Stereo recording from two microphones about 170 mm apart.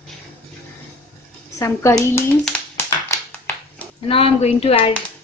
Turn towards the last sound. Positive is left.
turn(degrees=35)  # may be behind; listen again after turning